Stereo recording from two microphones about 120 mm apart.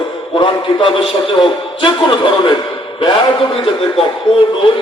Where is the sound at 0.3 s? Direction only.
45° left (ahead or behind).